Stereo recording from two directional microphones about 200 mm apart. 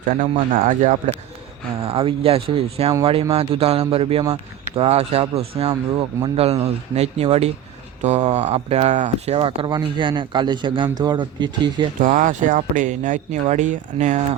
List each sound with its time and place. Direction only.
0.0 s a man's voice: 45° right (ahead or behind)
1.9 s a man's voice: 25° right (ahead or behind)
11.9 s a man's voice: 40° right (ahead or behind)